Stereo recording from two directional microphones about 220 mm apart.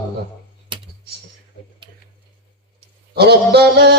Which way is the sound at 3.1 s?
45° right (ahead or behind).